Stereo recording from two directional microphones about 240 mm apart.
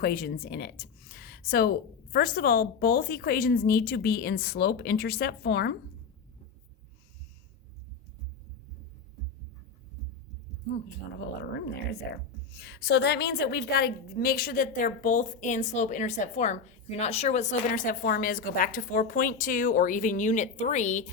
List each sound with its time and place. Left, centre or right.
0.0 s a woman's voice: left
11.2 s a woman's voice: left